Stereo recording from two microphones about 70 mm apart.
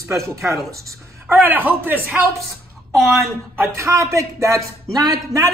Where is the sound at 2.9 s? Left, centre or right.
Centre.